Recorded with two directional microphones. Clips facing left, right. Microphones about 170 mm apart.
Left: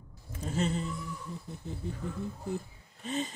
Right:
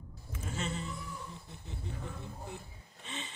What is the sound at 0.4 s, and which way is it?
Speech, 35° left (ahead or behind).